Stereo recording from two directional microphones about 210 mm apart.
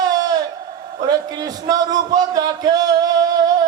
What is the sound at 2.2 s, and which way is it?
A man's voice, 20° right (ahead or behind).